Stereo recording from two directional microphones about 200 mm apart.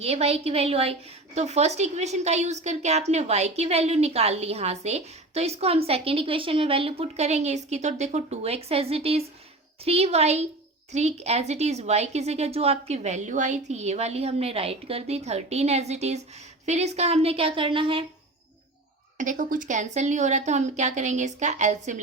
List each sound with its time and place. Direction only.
0.0 s a woman's voice: 30° right (ahead or behind)
19.1 s a woman's voice: 40° right (ahead or behind)